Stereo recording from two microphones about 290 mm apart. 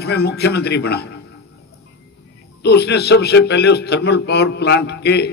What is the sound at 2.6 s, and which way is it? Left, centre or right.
A man's voice, left.